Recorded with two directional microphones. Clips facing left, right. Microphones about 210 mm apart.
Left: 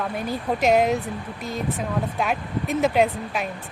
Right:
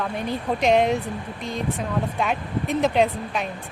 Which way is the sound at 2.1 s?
Centre (ahead or behind).